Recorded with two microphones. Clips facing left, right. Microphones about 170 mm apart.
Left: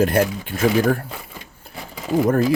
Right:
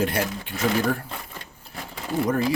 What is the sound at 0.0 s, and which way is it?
Speech, 50° left (ahead or behind).